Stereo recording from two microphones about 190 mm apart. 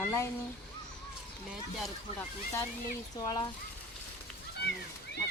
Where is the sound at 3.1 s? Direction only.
20° left (ahead or behind).